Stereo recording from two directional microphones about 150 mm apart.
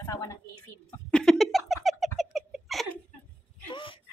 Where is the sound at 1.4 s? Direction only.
Centre (ahead or behind).